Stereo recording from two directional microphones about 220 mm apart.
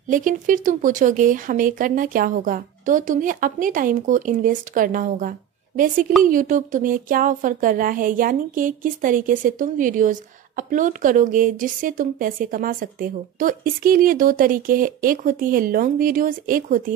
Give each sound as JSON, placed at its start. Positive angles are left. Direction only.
{"t": 0.1, "sound": "speech", "side_deg": -35}